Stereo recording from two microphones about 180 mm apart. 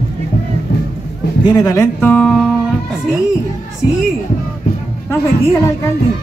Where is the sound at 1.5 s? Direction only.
20° left (ahead or behind).